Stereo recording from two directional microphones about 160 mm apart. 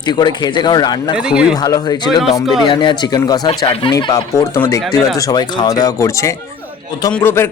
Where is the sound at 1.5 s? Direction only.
25° left (ahead or behind).